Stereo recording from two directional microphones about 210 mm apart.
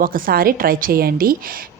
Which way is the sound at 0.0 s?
45° right (ahead or behind).